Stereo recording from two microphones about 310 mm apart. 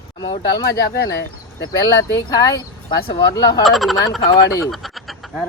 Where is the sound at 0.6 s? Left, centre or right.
Left.